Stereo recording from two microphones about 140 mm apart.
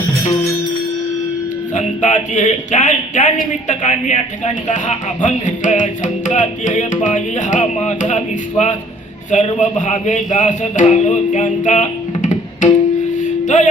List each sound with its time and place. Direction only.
1.7 s speech: 60° left (ahead or behind)
13.4 s music: 60° left (ahead or behind)